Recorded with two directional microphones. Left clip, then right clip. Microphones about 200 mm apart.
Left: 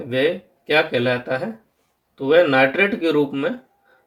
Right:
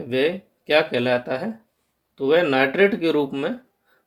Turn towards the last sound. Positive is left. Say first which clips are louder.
# left 2 dB
turn(degrees=-40)  # may be behind; listen again after turning